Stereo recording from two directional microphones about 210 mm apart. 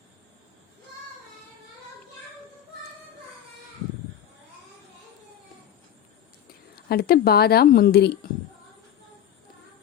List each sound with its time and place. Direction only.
6.7 s a woman's voice: 45° left (ahead or behind)